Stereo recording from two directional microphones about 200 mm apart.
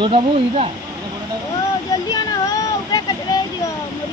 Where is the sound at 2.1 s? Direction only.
20° left (ahead or behind).